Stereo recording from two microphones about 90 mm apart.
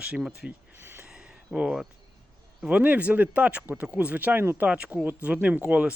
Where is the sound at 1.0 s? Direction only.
10° right (ahead or behind).